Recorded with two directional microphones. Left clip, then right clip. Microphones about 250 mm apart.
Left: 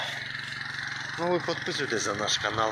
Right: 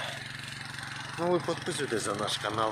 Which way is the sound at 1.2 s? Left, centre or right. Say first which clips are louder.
Left 1 dB; centre.